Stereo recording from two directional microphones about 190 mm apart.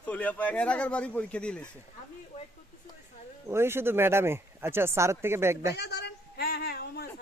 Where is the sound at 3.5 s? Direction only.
15° right (ahead or behind).